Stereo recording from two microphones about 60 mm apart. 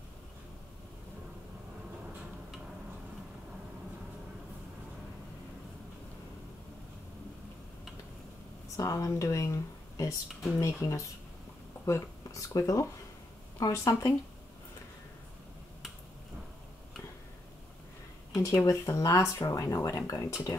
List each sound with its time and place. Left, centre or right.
8.6 s speech: left
18.3 s speech: left